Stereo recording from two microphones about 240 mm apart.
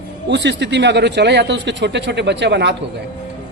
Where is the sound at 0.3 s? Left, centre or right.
Right.